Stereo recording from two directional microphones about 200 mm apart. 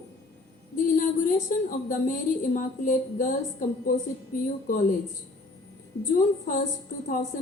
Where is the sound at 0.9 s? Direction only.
40° left (ahead or behind).